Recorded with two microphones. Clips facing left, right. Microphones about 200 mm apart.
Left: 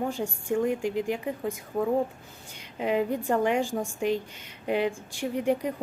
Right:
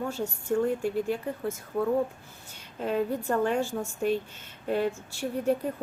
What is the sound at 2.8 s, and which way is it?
Speech, 15° left (ahead or behind).